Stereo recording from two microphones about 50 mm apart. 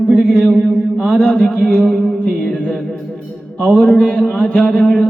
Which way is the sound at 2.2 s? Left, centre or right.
Left.